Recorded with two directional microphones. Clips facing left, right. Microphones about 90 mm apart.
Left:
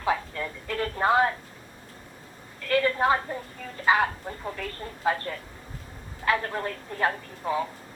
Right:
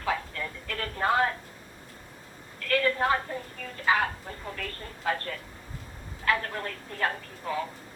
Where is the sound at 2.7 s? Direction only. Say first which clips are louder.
Left 2 dB; 20° left (ahead or behind).